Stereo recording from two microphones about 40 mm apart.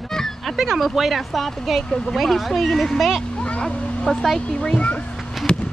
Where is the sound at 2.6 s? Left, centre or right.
Centre.